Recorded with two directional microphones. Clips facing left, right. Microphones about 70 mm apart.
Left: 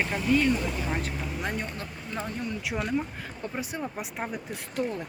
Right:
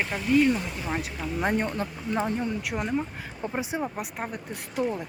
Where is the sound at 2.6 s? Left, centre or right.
Centre.